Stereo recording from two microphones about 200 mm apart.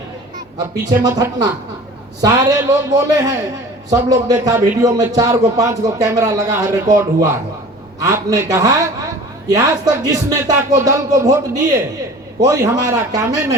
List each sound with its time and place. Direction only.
1.0 s a man's voice: 20° right (ahead or behind)